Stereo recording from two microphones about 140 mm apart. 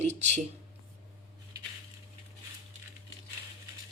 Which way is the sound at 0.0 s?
55° right (ahead or behind).